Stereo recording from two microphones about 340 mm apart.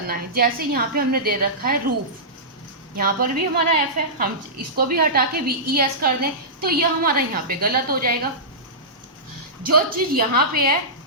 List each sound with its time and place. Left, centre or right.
0.1 s a woman's voice: right
2.9 s a woman's voice: right
9.7 s a woman's voice: right